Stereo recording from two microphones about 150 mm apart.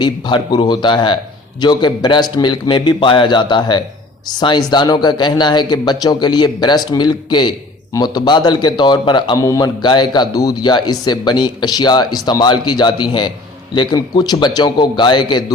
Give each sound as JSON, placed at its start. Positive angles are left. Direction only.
{"t": 0.0, "sound": "a man's voice", "side_deg": 30}